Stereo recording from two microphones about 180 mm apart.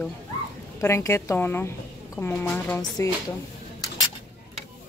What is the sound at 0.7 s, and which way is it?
A woman's voice, 15° left (ahead or behind).